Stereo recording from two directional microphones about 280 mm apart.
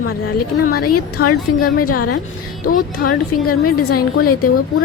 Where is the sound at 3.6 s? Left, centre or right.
Left.